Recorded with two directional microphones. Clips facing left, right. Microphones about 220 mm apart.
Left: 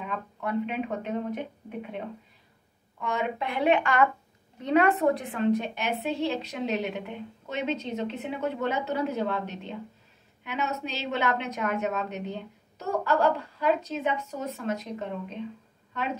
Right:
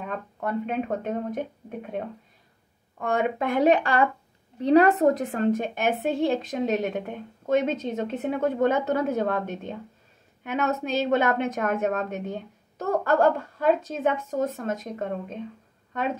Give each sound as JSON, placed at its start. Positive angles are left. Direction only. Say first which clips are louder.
{"t": 0.0, "sound": "a woman's voice", "louder": "right 2 dB", "side_deg": -45}